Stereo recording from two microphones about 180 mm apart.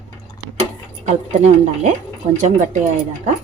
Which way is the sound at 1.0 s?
40° right (ahead or behind).